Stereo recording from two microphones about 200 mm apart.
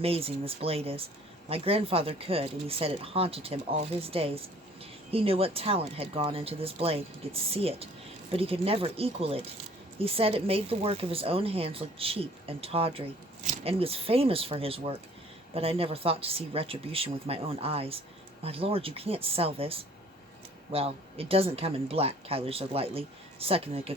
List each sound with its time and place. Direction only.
0.0 s speech: 30° right (ahead or behind)